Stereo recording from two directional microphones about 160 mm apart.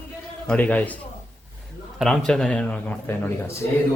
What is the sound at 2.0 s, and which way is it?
A man's voice, 5° left (ahead or behind).